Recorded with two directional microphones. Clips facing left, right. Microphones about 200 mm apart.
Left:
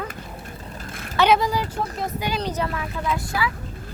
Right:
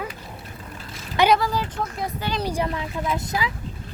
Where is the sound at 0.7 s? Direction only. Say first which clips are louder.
Left 1 dB; 50° left (ahead or behind).